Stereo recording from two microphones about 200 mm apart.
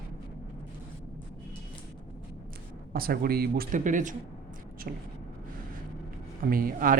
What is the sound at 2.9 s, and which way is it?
Speech, 50° right (ahead or behind).